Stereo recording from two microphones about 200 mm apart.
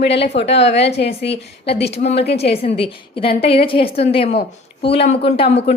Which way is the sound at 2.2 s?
55° left (ahead or behind).